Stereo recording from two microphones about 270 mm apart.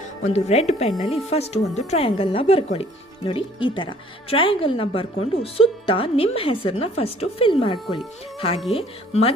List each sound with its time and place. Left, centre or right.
0.3 s a woman's voice: left